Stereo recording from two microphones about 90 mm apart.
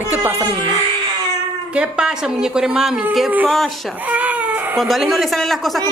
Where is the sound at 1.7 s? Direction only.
10° right (ahead or behind).